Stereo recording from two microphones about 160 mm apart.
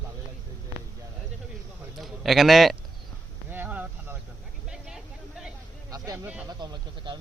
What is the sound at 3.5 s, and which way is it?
Insect, 10° right (ahead or behind).